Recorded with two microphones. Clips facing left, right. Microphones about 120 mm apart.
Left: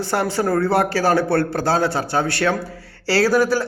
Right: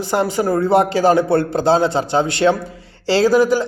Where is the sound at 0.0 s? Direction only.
15° right (ahead or behind).